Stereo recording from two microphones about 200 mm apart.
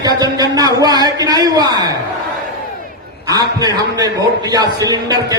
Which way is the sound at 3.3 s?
20° right (ahead or behind).